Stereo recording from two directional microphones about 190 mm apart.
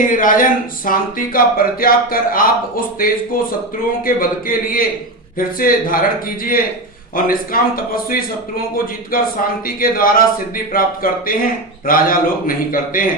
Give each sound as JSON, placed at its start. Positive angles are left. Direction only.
{"t": 0.0, "sound": "speech", "side_deg": 45}